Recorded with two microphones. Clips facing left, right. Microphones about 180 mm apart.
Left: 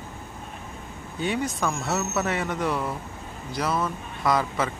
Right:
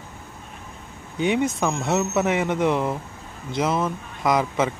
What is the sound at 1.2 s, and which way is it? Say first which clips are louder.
Speech: right 5 dB; 20° right (ahead or behind).